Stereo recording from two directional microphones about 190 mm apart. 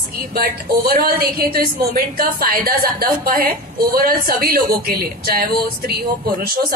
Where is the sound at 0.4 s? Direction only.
55° right (ahead or behind).